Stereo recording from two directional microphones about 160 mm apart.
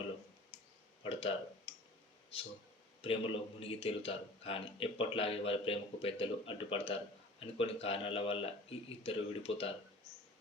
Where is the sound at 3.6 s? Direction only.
35° left (ahead or behind).